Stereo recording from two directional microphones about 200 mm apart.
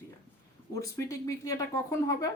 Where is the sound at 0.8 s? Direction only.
15° left (ahead or behind).